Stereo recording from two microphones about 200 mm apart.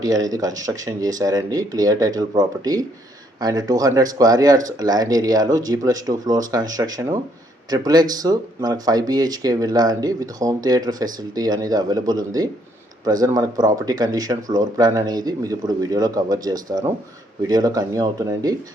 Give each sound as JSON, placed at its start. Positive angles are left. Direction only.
{"t": 0.0, "sound": "speech", "side_deg": -20}